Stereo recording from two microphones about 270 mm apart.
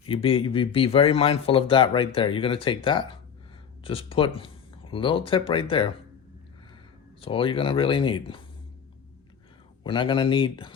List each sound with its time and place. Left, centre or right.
0.1 s speech: centre
7.2 s speech: centre
9.8 s speech: centre